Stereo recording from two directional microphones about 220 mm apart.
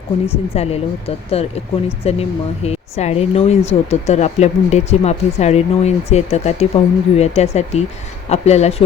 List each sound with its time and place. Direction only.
0.5 s speech: 30° left (ahead or behind)